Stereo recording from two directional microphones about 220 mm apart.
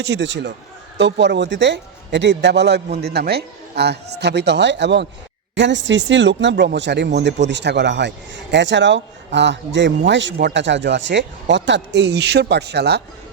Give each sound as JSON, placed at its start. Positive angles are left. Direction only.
{"t": 0.0, "sound": "speech", "side_deg": -50}